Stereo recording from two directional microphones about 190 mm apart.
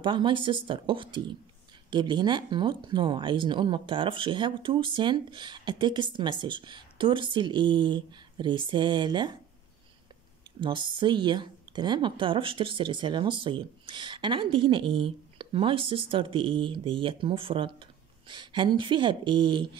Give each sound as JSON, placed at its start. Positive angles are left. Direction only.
{"t": 0.0, "sound": "speech", "side_deg": -25}
{"t": 10.6, "sound": "speech", "side_deg": -25}